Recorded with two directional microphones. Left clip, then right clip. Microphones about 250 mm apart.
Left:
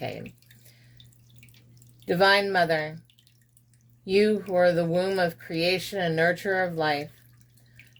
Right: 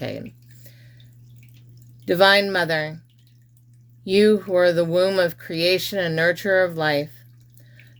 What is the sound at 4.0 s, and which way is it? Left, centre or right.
Speech, right.